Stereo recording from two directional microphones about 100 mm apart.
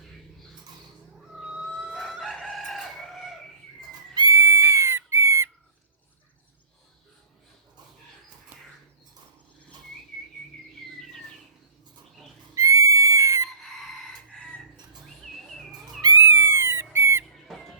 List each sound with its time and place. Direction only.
1.4 s a sound: 10° right (ahead or behind)
2.0 s chicken: centre (ahead or behind)
4.1 s goat: 40° right (ahead or behind)
4.4 s a sound: 25° right (ahead or behind)
12.5 s music: 30° right (ahead or behind)
13.6 s chicken: 5° left (ahead or behind)
16.0 s cat: 40° right (ahead or behind)
16.2 s a sound: 25° right (ahead or behind)
17.3 s squeak: centre (ahead or behind)